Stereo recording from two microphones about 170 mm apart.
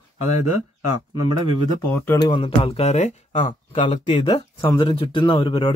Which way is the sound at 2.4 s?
30° left (ahead or behind).